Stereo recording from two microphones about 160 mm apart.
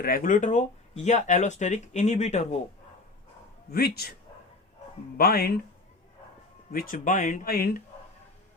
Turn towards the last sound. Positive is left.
turn(degrees=70)  # may be behind; listen again after turning